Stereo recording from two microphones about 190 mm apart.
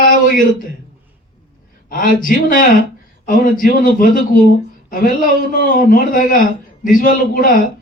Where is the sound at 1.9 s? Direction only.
45° left (ahead or behind).